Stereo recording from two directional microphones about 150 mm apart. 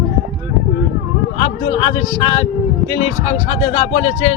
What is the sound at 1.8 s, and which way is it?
Speech, 40° left (ahead or behind).